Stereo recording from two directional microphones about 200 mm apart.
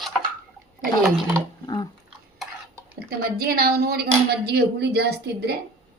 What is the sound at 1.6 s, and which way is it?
Dog, 20° left (ahead or behind).